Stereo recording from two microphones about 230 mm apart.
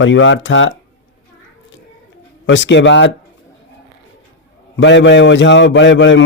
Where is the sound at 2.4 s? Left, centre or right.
Left.